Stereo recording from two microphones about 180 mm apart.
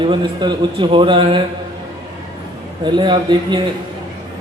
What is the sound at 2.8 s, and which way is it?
Speech, 25° right (ahead or behind).